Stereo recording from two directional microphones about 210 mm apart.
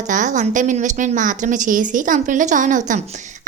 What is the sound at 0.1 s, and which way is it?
A woman's voice, 35° right (ahead or behind).